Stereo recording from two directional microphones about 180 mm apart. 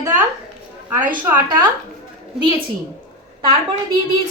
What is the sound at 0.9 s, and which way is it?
Speech, 10° right (ahead or behind).